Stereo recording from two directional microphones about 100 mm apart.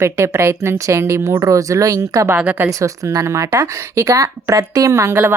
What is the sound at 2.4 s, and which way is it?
A woman's voice, 20° right (ahead or behind).